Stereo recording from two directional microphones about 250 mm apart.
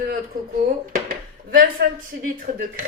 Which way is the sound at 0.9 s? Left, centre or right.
Right.